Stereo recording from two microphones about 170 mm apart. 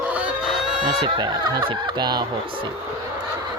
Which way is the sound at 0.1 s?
5° right (ahead or behind).